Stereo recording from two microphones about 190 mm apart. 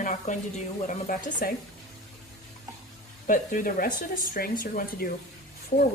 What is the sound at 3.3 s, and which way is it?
Speech, 45° left (ahead or behind).